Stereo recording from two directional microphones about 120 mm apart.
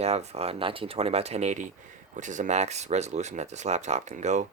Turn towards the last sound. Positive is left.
turn(degrees=-75)  # may be behind; listen again after turning